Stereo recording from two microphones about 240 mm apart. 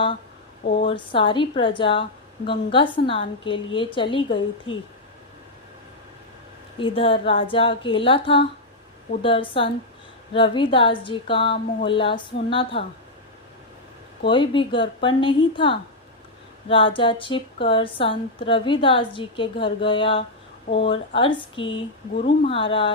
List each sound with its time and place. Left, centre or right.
0.8 s speech: left
6.7 s speech: left
14.3 s speech: centre